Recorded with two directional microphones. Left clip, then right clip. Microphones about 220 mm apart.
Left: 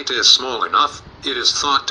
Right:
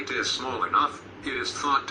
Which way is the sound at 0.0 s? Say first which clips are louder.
Left 13 dB; 25° left (ahead or behind).